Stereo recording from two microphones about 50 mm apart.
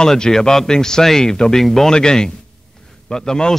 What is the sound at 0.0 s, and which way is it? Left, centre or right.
A man's voice, centre.